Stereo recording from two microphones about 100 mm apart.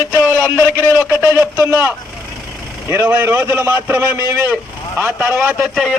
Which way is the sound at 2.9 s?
25° right (ahead or behind).